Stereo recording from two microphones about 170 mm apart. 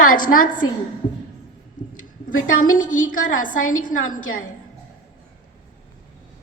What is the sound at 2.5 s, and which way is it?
A woman's voice, 50° left (ahead or behind).